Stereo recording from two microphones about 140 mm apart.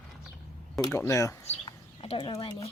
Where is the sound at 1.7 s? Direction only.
40° left (ahead or behind).